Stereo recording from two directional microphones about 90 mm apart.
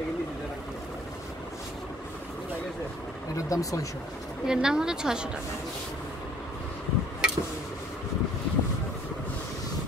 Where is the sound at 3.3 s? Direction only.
40° left (ahead or behind).